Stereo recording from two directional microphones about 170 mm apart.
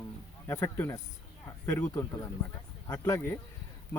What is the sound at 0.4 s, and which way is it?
Speech, 15° left (ahead or behind).